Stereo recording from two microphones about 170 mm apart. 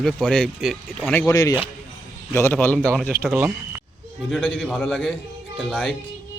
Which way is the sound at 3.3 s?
15° right (ahead or behind).